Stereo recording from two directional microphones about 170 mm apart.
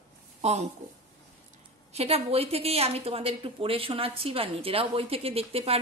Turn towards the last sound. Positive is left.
turn(degrees=-35)  # may be behind; listen again after turning